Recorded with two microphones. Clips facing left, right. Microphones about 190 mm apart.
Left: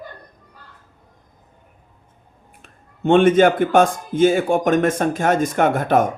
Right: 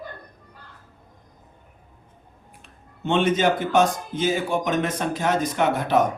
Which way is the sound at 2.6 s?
50° left (ahead or behind).